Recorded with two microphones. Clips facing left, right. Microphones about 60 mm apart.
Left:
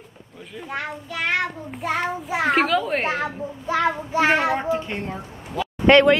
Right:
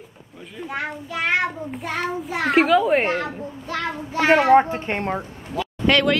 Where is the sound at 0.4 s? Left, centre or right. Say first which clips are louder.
Right 1 dB; centre.